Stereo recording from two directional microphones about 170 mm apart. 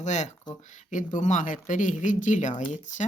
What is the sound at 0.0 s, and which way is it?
Speech, 45° left (ahead or behind).